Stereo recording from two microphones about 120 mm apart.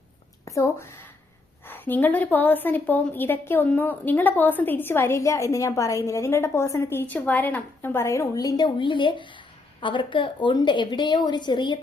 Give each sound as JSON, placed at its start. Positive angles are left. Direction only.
{"t": 0.4, "sound": "a woman's voice", "side_deg": 25}